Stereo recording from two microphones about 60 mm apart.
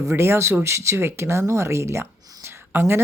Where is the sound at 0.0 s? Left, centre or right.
Right.